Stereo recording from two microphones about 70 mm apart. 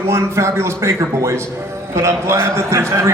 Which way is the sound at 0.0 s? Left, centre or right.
Right.